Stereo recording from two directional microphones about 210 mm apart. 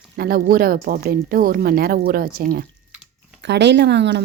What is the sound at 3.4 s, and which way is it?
Speech, 55° right (ahead or behind).